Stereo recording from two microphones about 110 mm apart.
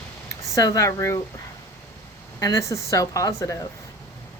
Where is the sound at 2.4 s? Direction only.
30° left (ahead or behind).